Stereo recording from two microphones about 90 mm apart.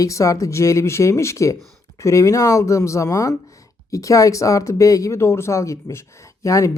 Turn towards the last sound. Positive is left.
turn(degrees=35)  # may be behind; listen again after turning